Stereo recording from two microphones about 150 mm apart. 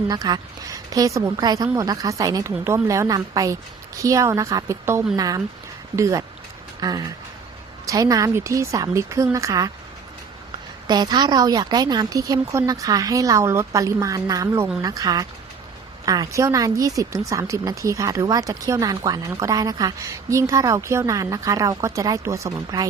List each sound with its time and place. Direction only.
0.1 s a woman's voice: 25° right (ahead or behind)
10.8 s a woman's voice: 30° right (ahead or behind)